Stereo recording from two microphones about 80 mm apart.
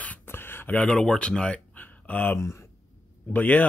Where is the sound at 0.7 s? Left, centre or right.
Centre.